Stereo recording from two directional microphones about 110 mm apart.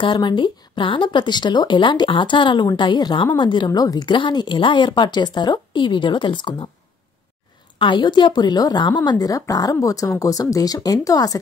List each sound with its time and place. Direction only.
0.0 s speech: 45° left (ahead or behind)
7.8 s speech: 45° left (ahead or behind)